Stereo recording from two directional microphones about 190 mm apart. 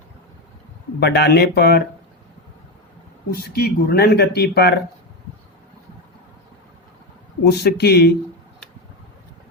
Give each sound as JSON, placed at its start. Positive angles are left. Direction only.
{"t": 0.9, "sound": "speech", "side_deg": 60}
{"t": 3.3, "sound": "speech", "side_deg": 55}
{"t": 7.4, "sound": "speech", "side_deg": 60}